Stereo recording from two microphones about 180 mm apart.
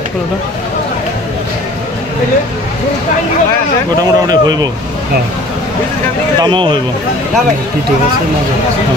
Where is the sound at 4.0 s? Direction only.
20° right (ahead or behind).